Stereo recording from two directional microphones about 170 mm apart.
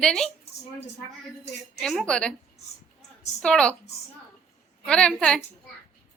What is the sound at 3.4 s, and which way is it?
Speech, 5° left (ahead or behind).